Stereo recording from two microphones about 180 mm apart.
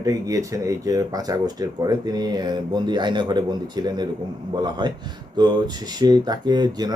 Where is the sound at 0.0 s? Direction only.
20° right (ahead or behind).